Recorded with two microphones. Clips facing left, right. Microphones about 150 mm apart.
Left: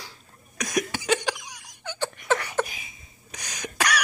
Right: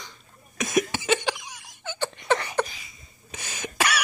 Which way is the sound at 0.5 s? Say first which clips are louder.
Right 3 dB; centre (ahead or behind).